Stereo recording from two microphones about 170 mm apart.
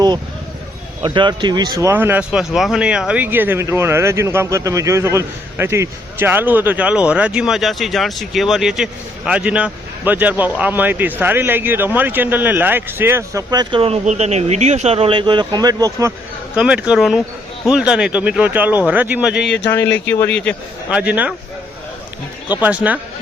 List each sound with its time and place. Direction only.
1.0 s speech: 30° right (ahead or behind)
16.6 s speech: 5° right (ahead or behind)
19.4 s speech: 90° left
19.9 s speech: 10° left (ahead or behind)
20.9 s speech: 5° right (ahead or behind)
22.6 s speech: 10° right (ahead or behind)